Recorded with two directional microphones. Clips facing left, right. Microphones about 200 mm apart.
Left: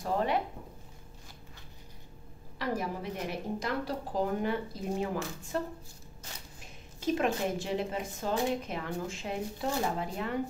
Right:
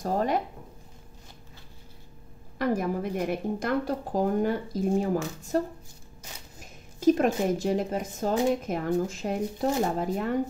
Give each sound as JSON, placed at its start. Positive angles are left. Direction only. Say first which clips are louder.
{"t": 0.0, "sound": "a woman's voice", "louder": "right 3 dB", "side_deg": -40}
{"t": 2.6, "sound": "a woman's voice", "louder": "right 7 dB", "side_deg": -50}
{"t": 6.6, "sound": "a woman's voice", "louder": "right 12 dB", "side_deg": -45}